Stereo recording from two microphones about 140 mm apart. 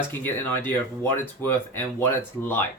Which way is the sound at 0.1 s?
15° left (ahead or behind).